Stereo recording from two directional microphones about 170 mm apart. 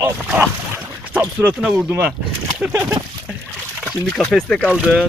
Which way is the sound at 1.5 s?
5° right (ahead or behind).